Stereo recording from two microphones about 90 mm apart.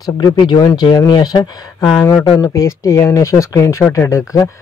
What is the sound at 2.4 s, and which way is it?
A man's voice, 40° left (ahead or behind).